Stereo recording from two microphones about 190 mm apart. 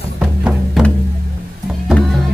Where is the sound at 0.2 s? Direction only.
5° right (ahead or behind).